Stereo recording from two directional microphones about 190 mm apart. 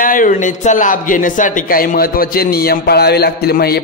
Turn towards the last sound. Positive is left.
turn(degrees=55)  # may be behind; listen again after turning